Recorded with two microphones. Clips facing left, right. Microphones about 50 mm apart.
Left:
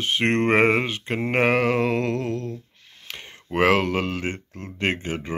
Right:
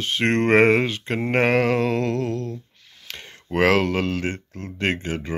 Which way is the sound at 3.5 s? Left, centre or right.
Centre.